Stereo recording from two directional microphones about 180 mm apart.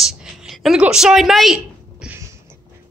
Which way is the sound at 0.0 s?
Centre (ahead or behind).